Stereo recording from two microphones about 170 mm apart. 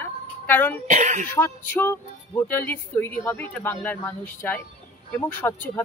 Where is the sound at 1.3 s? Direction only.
10° left (ahead or behind).